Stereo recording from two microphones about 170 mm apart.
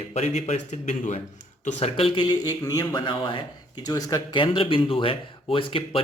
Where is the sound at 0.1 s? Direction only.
40° left (ahead or behind).